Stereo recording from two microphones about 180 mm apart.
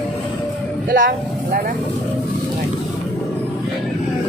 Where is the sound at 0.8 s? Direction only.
50° right (ahead or behind).